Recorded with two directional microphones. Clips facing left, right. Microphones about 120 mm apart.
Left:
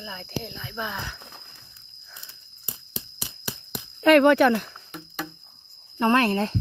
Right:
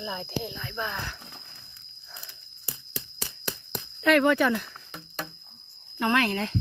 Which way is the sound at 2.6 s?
20° left (ahead or behind).